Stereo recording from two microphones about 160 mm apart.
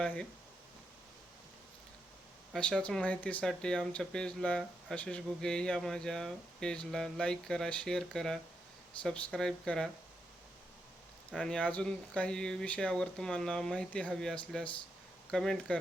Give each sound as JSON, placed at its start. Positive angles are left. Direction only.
{"t": 0.0, "sound": "speech", "side_deg": 5}
{"t": 2.5, "sound": "speech", "side_deg": 5}
{"t": 11.3, "sound": "speech", "side_deg": 5}